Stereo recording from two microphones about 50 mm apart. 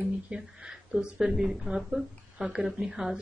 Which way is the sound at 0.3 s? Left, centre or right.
Centre.